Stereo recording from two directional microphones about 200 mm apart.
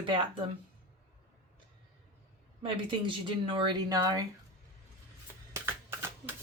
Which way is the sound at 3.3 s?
25° right (ahead or behind).